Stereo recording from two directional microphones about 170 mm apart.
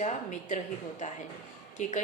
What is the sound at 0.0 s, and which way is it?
A woman's voice, 45° left (ahead or behind).